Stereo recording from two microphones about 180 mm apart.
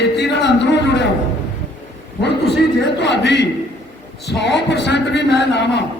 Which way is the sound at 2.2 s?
70° left (ahead or behind).